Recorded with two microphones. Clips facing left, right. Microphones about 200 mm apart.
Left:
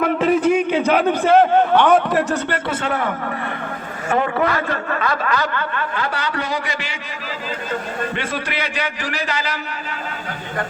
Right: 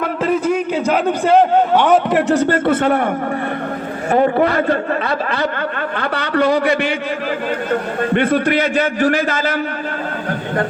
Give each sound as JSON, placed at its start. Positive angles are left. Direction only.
{"t": 0.0, "sound": "a sound", "side_deg": 5}
{"t": 1.8, "sound": "a man's voice", "side_deg": -15}
{"t": 2.4, "sound": "a man's voice", "side_deg": -50}
{"t": 4.1, "sound": "a man's voice", "side_deg": -35}
{"t": 5.5, "sound": "a man's voice", "side_deg": -55}